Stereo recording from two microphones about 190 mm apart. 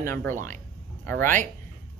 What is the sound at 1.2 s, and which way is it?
Speech, 45° right (ahead or behind).